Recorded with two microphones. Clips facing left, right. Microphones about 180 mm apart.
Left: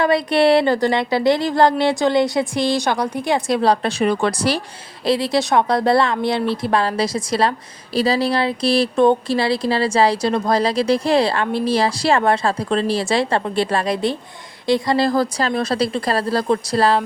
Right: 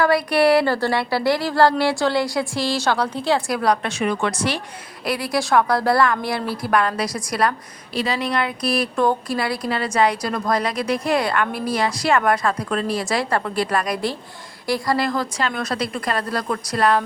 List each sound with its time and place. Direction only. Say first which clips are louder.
0.0 s a woman's voice: left 1 dB; 25° left (ahead or behind)